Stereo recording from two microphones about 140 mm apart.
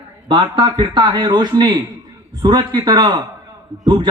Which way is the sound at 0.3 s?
40° right (ahead or behind).